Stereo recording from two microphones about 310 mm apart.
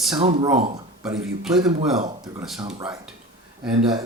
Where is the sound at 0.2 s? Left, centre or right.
Centre.